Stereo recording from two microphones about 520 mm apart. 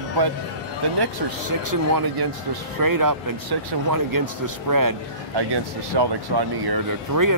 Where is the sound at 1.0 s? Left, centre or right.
Right.